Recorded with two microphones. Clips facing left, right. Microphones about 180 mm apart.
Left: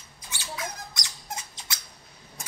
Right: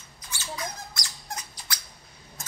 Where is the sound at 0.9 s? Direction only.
20° left (ahead or behind).